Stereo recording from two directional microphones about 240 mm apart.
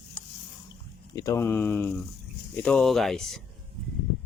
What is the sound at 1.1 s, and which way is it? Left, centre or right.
Speech, centre.